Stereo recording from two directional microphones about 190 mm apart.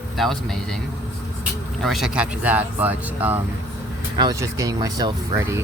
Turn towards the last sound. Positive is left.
turn(degrees=-20)  # may be behind; listen again after turning